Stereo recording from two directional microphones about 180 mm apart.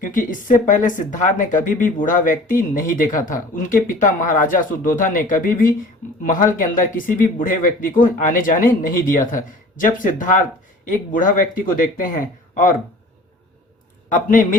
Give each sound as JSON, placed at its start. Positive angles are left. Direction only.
{"t": 0.0, "sound": "speech", "side_deg": 50}
{"t": 14.1, "sound": "speech", "side_deg": 45}